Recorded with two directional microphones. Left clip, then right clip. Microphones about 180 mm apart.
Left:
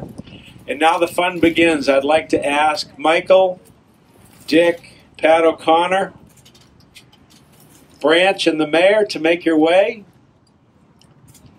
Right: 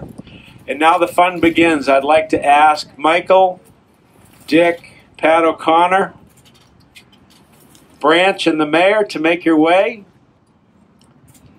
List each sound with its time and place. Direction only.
0.2 s speech: 40° right (ahead or behind)
8.0 s speech: 40° right (ahead or behind)